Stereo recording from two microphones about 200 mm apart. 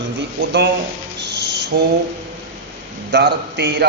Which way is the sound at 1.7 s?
55° right (ahead or behind).